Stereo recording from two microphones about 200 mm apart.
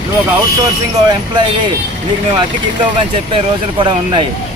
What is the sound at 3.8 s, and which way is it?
Speech, 25° right (ahead or behind).